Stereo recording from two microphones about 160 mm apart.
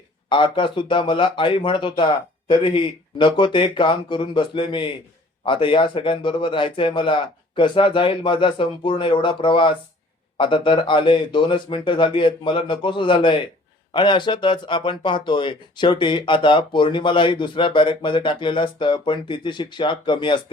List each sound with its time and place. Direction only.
0.3 s speech: 30° left (ahead or behind)